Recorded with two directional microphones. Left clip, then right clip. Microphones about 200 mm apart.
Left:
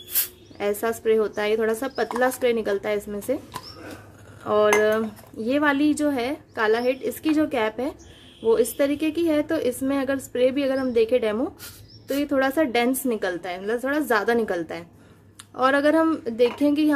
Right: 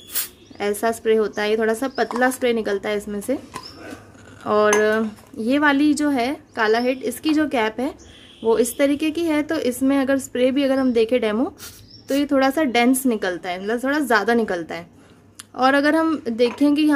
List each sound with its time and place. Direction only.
0.1 s speech: centre (ahead or behind)